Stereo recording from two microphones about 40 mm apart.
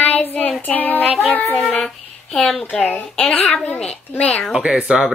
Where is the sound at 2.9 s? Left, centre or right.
Left.